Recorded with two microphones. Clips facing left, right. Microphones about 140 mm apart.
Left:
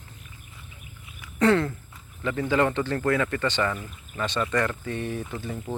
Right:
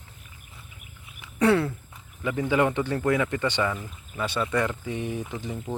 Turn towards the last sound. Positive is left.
turn(degrees=-15)  # may be behind; listen again after turning